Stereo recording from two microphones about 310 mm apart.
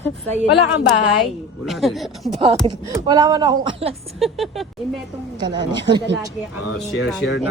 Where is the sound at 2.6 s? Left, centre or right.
Centre.